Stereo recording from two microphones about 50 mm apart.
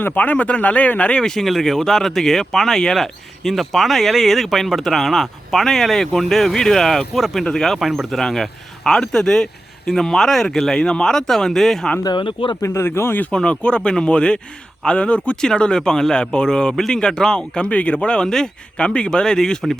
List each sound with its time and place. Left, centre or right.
0.0 s speech: left
1.2 s speech: centre
8.2 s speech: centre
12.6 s speech: left
13.3 s speech: left